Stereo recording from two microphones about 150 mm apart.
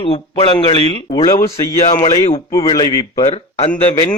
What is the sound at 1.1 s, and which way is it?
Speech, 25° left (ahead or behind).